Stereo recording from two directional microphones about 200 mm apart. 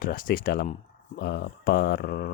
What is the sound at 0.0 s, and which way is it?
Speech, 45° left (ahead or behind).